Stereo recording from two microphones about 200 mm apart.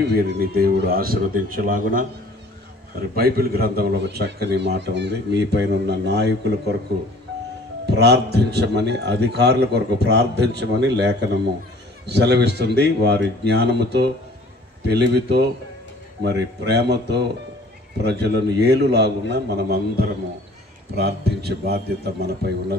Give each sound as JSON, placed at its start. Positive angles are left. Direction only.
{"t": 0.0, "sound": "a man's voice", "side_deg": -55}
{"t": 7.8, "sound": "a man's voice", "side_deg": -55}